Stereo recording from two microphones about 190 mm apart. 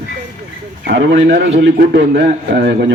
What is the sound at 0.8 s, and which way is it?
A man's voice, 70° right (ahead or behind).